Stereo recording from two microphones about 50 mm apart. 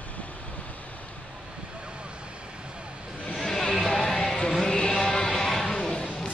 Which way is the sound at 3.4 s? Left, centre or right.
Centre.